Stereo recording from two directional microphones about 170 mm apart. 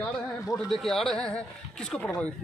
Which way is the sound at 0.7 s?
Centre (ahead or behind).